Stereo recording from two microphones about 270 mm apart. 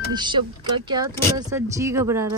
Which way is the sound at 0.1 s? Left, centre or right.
Centre.